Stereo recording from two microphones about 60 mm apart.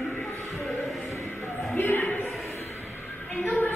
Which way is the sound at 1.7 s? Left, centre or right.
Left.